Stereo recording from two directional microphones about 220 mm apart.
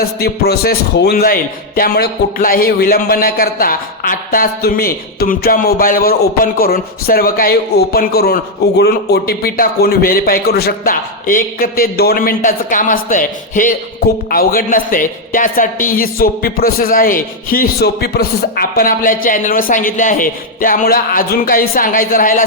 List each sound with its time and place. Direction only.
0.0 s a man's voice: 45° left (ahead or behind)